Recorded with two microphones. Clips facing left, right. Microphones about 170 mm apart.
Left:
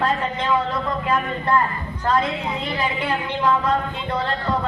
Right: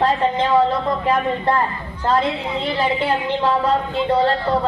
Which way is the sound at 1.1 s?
30° right (ahead or behind).